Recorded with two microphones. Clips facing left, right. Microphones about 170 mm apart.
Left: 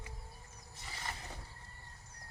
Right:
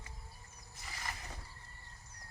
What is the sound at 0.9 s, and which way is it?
Mechanisms, 30° left (ahead or behind).